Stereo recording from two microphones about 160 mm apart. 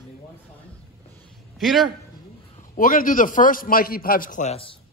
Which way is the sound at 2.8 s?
60° left (ahead or behind).